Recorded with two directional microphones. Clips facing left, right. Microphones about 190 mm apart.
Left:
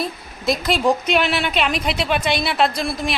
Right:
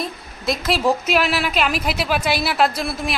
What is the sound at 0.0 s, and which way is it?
A woman's voice, centre (ahead or behind).